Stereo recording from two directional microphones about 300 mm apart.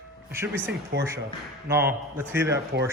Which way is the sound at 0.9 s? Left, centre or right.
Right.